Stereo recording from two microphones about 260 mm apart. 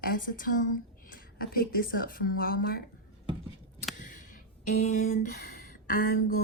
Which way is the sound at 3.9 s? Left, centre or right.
Left.